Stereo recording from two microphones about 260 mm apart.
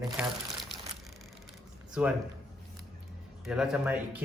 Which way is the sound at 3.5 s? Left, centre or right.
Centre.